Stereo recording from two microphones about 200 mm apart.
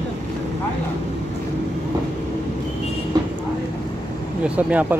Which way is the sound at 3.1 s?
20° right (ahead or behind).